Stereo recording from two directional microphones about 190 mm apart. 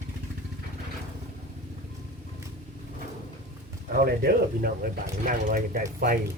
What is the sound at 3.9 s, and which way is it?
Speech, 55° right (ahead or behind).